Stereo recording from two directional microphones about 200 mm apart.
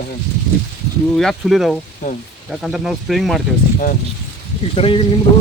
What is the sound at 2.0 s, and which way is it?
Speech, 40° left (ahead or behind).